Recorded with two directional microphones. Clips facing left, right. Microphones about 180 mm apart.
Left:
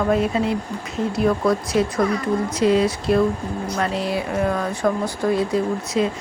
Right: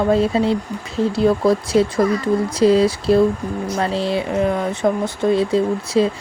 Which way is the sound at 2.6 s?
35° right (ahead or behind).